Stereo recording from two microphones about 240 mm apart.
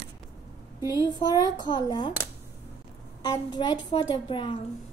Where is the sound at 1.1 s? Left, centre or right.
Centre.